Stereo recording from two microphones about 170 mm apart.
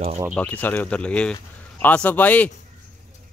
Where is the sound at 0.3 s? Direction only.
10° left (ahead or behind).